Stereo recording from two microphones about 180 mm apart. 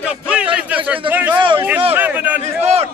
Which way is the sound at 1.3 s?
25° right (ahead or behind).